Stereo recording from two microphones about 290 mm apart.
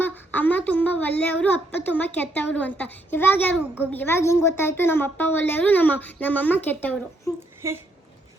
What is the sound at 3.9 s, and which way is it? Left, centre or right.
Speech, centre.